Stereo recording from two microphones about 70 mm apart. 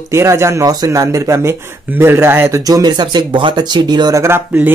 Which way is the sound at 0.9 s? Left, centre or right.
Right.